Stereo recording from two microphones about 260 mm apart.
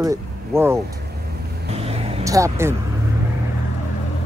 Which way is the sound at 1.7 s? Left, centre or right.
Right.